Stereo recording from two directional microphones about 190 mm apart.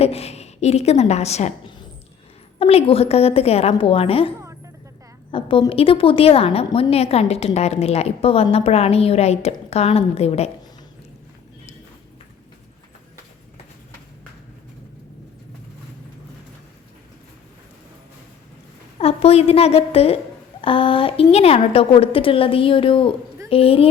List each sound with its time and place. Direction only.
0.0 s a woman's voice: 35° left (ahead or behind)
2.6 s a woman's voice: 30° left (ahead or behind)
18.9 s a woman's voice: 30° left (ahead or behind)